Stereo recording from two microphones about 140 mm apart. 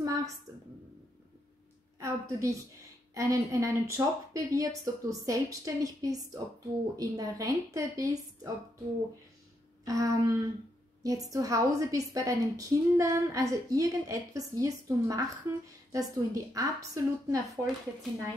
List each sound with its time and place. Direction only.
0.0 s a sound: 25° right (ahead or behind)
2.0 s a woman's voice: 20° right (ahead or behind)
9.8 s a woman's voice: 25° right (ahead or behind)